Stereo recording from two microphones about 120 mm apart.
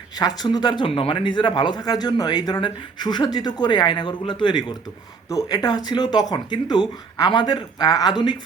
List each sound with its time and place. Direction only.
0.2 s speech: 35° left (ahead or behind)